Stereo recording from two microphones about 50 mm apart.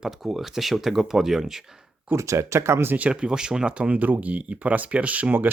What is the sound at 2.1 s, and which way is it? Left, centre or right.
Speech, right.